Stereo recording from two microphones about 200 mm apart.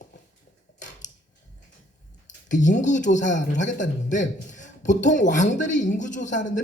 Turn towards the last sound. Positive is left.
turn(degrees=40)  # may be behind; listen again after turning